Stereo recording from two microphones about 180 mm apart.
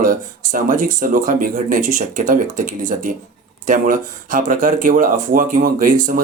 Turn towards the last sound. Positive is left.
turn(degrees=-50)  # may be behind; listen again after turning